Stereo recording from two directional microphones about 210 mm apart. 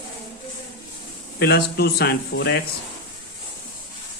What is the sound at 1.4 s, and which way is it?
Speech, 50° left (ahead or behind).